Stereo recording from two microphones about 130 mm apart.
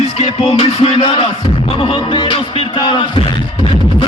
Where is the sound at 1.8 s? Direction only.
40° left (ahead or behind).